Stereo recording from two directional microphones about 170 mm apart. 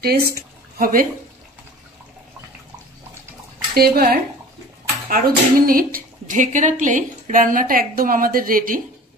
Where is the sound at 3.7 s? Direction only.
65° right (ahead or behind).